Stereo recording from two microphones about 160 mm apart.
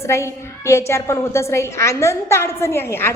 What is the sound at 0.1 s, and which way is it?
A woman's voice, 15° left (ahead or behind).